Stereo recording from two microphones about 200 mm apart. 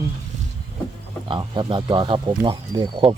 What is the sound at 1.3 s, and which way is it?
Speech, 25° right (ahead or behind).